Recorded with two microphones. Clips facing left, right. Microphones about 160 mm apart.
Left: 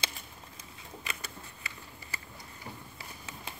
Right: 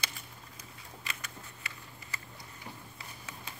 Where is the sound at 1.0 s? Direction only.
30° left (ahead or behind).